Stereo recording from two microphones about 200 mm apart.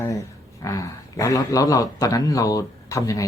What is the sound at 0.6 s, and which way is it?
A man's voice, 15° left (ahead or behind).